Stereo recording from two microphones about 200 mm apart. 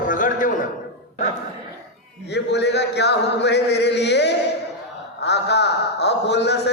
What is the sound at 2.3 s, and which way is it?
A man's voice, 60° left (ahead or behind).